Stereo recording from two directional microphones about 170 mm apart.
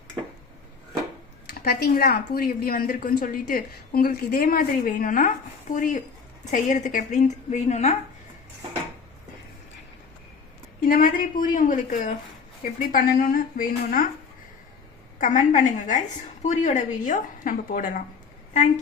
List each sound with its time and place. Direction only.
1.6 s a woman's voice: 65° left (ahead or behind); by 7.9 s 40° left (ahead or behind)
10.8 s a woman's voice: 55° left (ahead or behind)
15.2 s a woman's voice: 45° left (ahead or behind)